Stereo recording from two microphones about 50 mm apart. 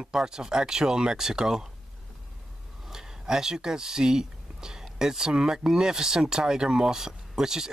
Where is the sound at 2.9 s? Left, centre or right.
Centre.